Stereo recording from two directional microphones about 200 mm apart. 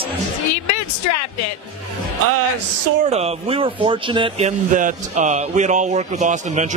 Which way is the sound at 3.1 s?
30° right (ahead or behind).